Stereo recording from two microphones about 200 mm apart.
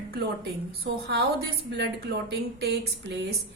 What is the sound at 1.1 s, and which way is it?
Speech, 50° right (ahead or behind).